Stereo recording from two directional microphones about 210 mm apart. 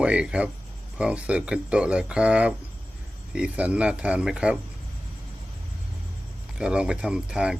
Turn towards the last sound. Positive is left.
turn(degrees=-5)  # may be behind; listen again after turning